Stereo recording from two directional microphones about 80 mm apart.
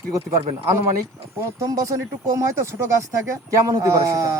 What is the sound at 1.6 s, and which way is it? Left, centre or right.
Speech, right.